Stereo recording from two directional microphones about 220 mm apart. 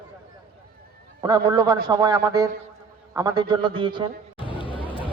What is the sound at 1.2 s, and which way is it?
A man's voice, 20° right (ahead or behind).